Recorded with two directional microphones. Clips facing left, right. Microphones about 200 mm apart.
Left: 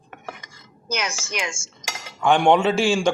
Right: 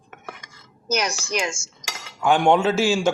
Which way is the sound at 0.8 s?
40° right (ahead or behind).